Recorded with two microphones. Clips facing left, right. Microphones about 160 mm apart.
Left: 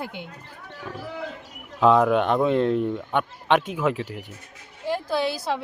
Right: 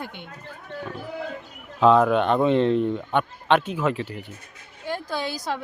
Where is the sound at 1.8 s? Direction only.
10° left (ahead or behind).